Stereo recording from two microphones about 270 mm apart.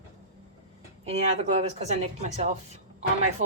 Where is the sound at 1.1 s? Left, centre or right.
Right.